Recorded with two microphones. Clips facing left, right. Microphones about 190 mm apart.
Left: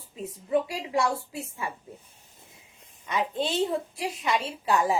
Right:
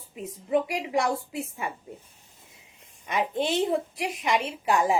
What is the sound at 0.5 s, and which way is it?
A woman's voice, 20° right (ahead or behind).